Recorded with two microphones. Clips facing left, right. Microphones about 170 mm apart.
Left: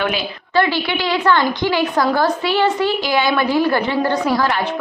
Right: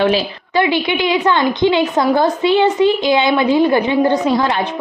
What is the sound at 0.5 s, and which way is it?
A woman's voice, 20° right (ahead or behind).